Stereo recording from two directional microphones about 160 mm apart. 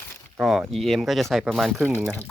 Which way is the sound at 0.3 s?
Centre (ahead or behind).